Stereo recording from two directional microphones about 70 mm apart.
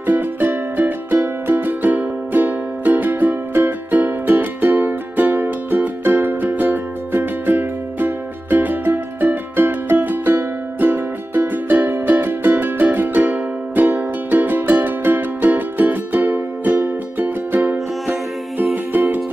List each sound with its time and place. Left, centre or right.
0.0 s music: right